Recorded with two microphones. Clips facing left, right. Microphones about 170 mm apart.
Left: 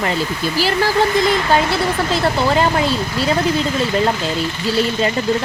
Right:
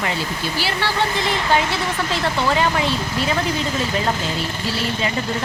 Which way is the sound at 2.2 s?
35° left (ahead or behind).